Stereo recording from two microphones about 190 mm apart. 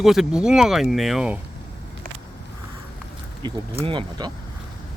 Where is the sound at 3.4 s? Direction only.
25° right (ahead or behind).